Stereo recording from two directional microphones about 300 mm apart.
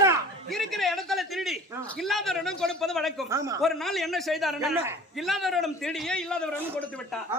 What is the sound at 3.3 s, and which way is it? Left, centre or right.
Speech, centre.